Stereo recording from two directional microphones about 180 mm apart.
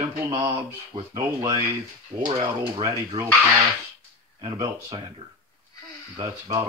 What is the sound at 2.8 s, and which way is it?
Speech, 15° right (ahead or behind).